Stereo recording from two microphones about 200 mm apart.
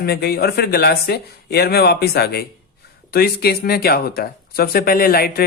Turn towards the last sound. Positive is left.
turn(degrees=50)  # may be behind; listen again after turning